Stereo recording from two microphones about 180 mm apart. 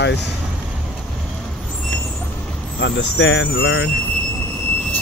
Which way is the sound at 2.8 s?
90° left.